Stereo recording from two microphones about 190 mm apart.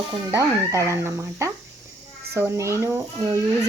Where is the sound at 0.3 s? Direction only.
15° right (ahead or behind).